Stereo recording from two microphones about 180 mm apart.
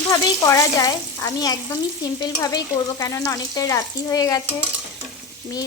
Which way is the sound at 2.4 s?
20° left (ahead or behind).